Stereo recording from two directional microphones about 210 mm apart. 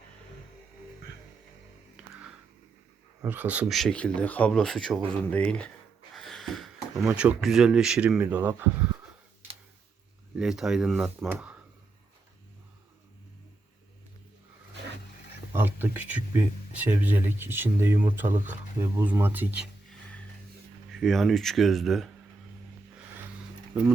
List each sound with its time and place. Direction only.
3.2 s speech: 10° right (ahead or behind)
10.3 s speech: centre (ahead or behind)
15.5 s speech: 10° right (ahead or behind)
20.9 s speech: centre (ahead or behind)